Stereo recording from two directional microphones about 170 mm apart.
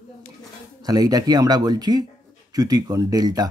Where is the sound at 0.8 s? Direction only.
20° right (ahead or behind).